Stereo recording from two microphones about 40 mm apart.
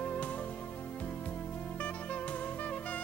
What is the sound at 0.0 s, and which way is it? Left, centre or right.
Music, left.